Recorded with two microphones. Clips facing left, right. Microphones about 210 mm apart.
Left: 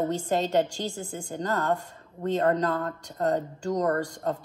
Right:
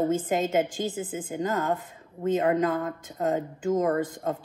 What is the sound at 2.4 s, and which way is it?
Speech, 15° right (ahead or behind).